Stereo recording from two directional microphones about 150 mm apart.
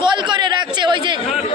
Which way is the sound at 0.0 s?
30° right (ahead or behind).